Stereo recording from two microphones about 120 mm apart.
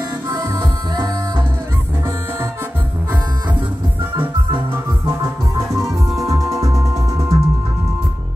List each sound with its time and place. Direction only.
0.3 s music: 25° right (ahead or behind)
5.0 s music: 20° right (ahead or behind)
5.8 s music: centre (ahead or behind)
6.2 s music: 25° right (ahead or behind)